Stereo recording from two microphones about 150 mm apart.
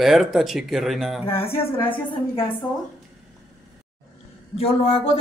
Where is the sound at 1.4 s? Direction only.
35° left (ahead or behind).